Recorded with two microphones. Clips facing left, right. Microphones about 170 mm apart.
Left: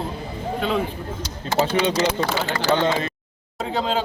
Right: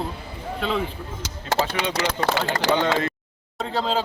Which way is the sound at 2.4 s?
65° right (ahead or behind).